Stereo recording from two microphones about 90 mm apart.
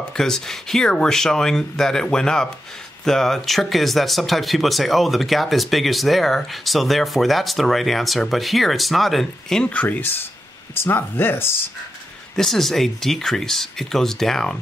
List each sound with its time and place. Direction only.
0.1 s speech: 5° left (ahead or behind)
9.7 s speech: 15° left (ahead or behind)
12.4 s speech: 5° left (ahead or behind)